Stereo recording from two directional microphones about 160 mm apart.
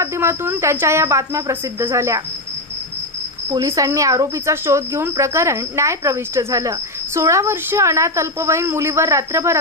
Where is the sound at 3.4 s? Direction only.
20° right (ahead or behind).